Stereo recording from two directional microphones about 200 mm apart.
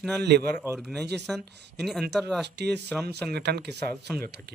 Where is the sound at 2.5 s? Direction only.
55° right (ahead or behind).